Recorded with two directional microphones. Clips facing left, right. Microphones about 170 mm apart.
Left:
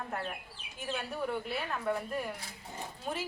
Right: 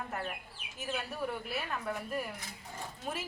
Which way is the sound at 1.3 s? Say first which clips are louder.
Left 2 dB; centre (ahead or behind).